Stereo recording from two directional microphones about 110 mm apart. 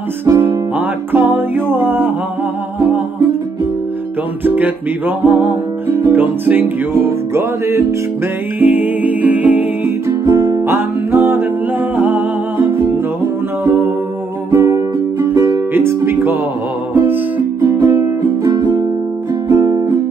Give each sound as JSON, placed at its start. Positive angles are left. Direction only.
{"t": 0.2, "sound": "music", "side_deg": -20}
{"t": 4.5, "sound": "music", "side_deg": -15}
{"t": 10.2, "sound": "music", "side_deg": -30}
{"t": 12.0, "sound": "humming", "side_deg": -20}
{"t": 14.5, "sound": "music", "side_deg": -25}